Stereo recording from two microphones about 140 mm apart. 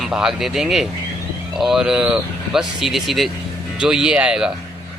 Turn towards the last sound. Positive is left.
turn(degrees=-5)  # may be behind; listen again after turning